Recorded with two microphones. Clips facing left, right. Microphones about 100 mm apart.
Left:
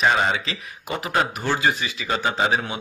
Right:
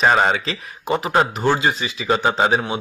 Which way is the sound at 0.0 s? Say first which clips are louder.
Right 4 dB; 45° right (ahead or behind).